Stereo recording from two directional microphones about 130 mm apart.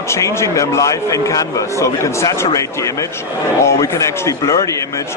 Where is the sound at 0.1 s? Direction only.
20° left (ahead or behind).